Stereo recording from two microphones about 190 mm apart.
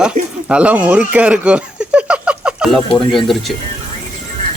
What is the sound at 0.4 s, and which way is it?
Speech, 5° right (ahead or behind).